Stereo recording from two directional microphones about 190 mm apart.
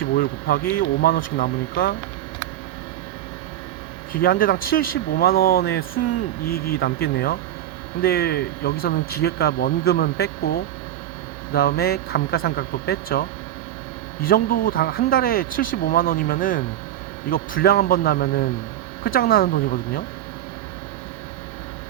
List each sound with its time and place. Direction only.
0.1 s speech: 55° left (ahead or behind)
4.2 s speech: 50° left (ahead or behind)
11.5 s speech: 55° left (ahead or behind)